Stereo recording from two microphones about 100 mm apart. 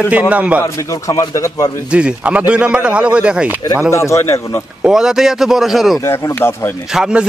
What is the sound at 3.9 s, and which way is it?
Speech, 30° left (ahead or behind).